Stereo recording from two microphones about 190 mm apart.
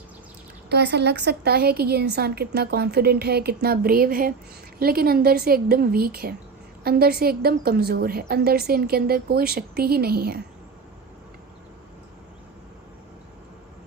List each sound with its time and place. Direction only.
0.7 s a woman's voice: 60° right (ahead or behind)